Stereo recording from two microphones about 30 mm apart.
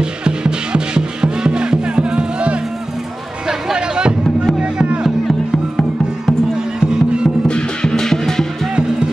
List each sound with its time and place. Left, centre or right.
0.2 s music: right
3.7 s music: right
5.5 s music: centre
6.8 s music: right
7.8 s music: centre